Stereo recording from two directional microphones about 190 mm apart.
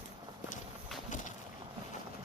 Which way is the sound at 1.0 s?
40° left (ahead or behind).